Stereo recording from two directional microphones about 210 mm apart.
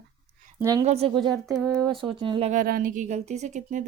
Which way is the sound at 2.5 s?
40° right (ahead or behind).